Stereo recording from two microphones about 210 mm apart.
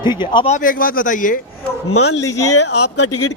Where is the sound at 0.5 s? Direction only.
40° left (ahead or behind).